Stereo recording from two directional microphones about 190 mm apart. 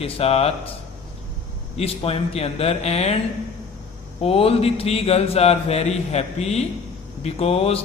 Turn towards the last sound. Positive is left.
turn(degrees=30)  # may be behind; listen again after turning